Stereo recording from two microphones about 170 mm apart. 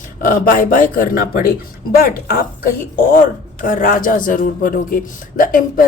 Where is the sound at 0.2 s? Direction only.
55° left (ahead or behind).